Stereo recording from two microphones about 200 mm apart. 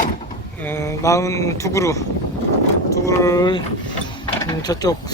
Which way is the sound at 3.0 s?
15° left (ahead or behind).